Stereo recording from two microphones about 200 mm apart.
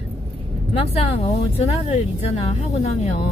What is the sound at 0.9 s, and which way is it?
Speech, 30° left (ahead or behind).